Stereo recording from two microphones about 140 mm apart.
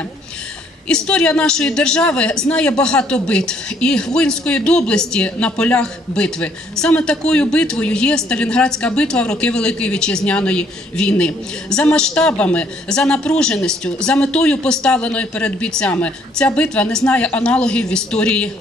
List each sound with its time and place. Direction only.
0.8 s a woman's voice: 5° left (ahead or behind)